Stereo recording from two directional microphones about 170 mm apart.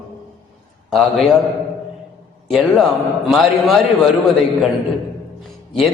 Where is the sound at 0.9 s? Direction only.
Centre (ahead or behind).